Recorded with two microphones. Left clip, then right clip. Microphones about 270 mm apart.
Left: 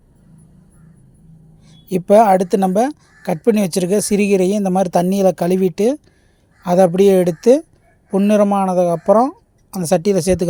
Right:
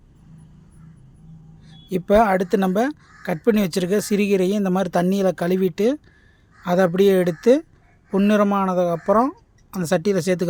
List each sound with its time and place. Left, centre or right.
1.6 s speech: centre